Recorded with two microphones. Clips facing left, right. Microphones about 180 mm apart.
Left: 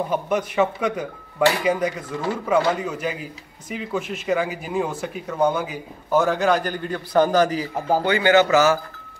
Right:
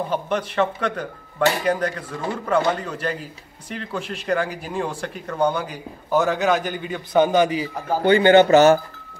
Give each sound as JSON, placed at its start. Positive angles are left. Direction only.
{"t": 0.1, "sound": "speech", "side_deg": 10}
{"t": 8.1, "sound": "a man's voice", "side_deg": -25}